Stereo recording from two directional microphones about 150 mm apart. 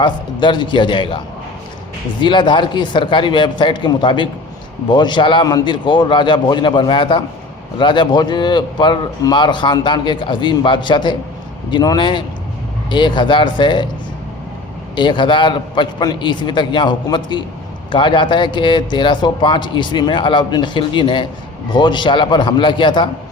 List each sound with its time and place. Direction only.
0.0 s speech: 30° left (ahead or behind)
2.2 s speech: 30° left (ahead or behind)
14.9 s speech: 30° left (ahead or behind)